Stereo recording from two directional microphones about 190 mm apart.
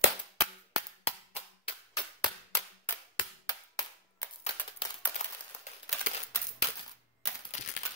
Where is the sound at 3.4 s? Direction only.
20° left (ahead or behind).